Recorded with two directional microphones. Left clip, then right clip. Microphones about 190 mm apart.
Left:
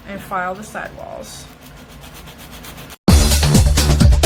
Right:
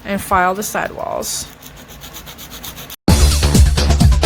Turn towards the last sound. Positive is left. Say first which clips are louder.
# even
turn(degrees=0)  # may be behind; listen again after turning